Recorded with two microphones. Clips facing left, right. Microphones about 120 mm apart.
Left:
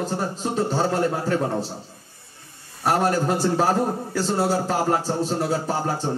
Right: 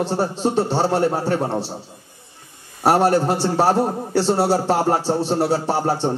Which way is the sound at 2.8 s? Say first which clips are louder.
Right 5 dB; 30° right (ahead or behind).